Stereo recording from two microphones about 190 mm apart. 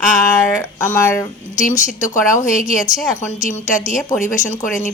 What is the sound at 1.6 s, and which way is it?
A woman's voice, 40° left (ahead or behind).